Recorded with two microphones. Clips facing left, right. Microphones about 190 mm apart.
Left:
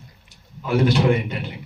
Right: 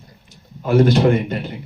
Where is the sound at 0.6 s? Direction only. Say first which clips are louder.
Right 4 dB; 45° right (ahead or behind).